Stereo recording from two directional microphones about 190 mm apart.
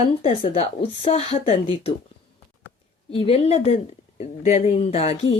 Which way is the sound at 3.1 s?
30° left (ahead or behind).